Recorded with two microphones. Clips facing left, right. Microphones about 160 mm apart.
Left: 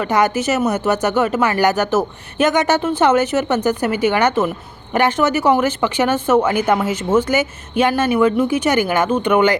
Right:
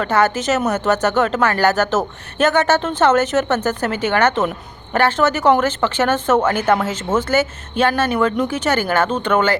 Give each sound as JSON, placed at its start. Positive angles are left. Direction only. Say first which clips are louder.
{"t": 0.0, "sound": "speech", "louder": "even", "side_deg": 15}